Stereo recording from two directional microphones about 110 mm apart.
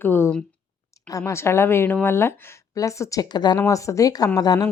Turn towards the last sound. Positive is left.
turn(degrees=35)  # may be behind; listen again after turning